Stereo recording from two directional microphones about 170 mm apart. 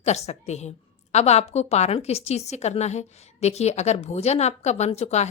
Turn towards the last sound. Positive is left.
turn(degrees=40)  # may be behind; listen again after turning